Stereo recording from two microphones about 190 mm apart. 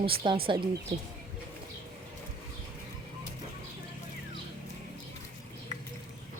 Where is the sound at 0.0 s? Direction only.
30° right (ahead or behind).